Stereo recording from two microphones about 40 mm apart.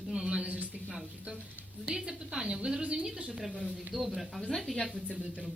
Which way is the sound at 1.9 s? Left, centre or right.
Centre.